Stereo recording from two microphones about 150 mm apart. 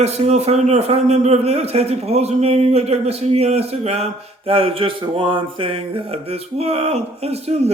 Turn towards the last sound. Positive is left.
turn(degrees=-45)  # may be behind; listen again after turning